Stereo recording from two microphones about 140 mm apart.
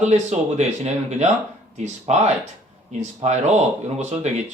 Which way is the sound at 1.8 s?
55° right (ahead or behind).